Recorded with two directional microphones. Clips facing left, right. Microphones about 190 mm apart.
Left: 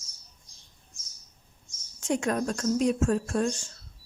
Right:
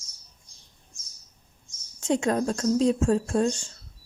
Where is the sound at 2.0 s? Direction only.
25° right (ahead or behind).